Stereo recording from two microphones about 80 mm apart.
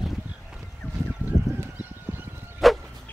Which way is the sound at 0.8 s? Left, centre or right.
Left.